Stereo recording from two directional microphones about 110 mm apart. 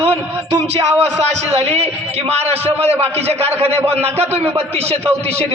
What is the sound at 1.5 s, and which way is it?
A man's voice, 65° right (ahead or behind).